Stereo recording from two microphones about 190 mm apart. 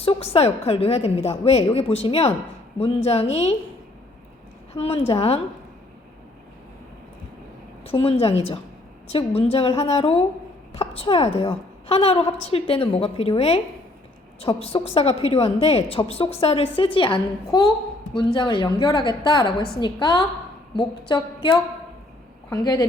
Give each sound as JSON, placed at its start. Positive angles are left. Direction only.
{"t": 0.0, "sound": "a woman's voice", "side_deg": 30}
{"t": 4.7, "sound": "a woman's voice", "side_deg": 30}
{"t": 7.9, "sound": "a woman's voice", "side_deg": 30}